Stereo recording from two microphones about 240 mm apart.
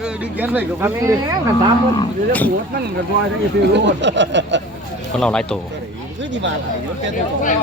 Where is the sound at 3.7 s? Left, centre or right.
Right.